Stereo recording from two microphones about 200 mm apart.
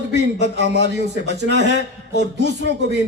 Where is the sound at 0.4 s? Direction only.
60° right (ahead or behind).